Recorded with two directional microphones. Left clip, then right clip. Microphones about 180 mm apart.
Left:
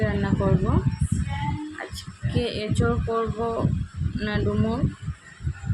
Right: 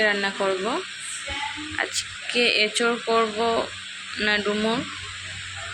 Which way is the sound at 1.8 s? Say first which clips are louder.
Right 9 dB; 10° left (ahead or behind).